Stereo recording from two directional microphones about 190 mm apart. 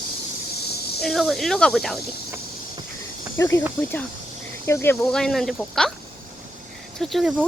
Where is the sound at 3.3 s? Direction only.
15° left (ahead or behind).